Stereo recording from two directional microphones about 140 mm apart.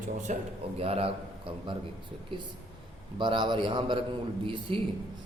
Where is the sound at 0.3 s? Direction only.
60° right (ahead or behind).